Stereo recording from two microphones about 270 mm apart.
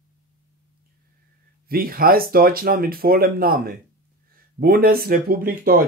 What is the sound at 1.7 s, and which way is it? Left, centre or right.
Speech, right.